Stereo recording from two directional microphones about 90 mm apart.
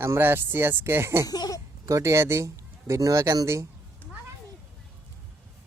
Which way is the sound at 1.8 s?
35° right (ahead or behind).